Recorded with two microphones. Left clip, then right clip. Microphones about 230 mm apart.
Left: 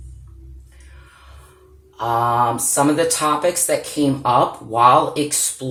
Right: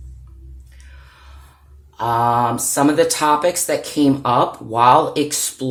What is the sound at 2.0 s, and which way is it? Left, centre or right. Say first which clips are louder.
Speech: right 1 dB; right.